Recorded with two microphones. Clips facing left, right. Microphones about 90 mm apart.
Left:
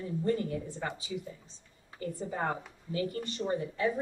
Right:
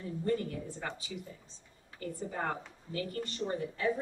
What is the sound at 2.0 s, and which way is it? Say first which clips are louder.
A woman's voice: left 3 dB; 25° left (ahead or behind).